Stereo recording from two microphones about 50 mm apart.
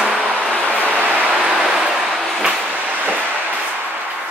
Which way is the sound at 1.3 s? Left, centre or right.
Right.